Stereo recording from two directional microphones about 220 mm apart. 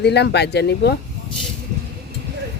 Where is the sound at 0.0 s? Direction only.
50° left (ahead or behind).